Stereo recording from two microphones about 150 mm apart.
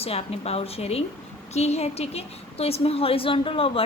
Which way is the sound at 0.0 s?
40° left (ahead or behind).